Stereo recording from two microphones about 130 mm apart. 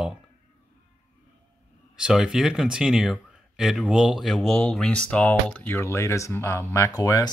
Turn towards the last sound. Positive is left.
turn(degrees=30)  # may be behind; listen again after turning